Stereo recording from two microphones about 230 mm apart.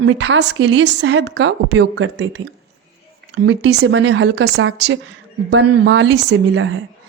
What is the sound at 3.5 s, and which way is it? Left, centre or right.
A woman's voice, right.